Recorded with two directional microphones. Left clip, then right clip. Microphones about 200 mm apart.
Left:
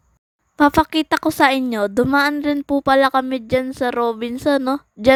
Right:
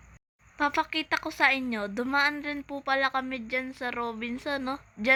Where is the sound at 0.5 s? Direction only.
60° left (ahead or behind).